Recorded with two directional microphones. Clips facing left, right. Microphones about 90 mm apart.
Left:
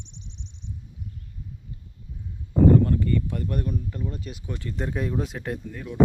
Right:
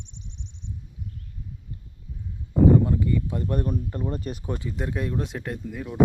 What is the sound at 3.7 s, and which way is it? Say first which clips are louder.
Speech: right 3 dB; 40° right (ahead or behind).